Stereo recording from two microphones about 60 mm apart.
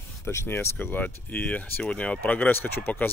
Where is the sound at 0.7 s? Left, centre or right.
Left.